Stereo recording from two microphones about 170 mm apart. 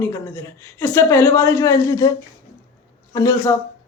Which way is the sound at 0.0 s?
15° left (ahead or behind).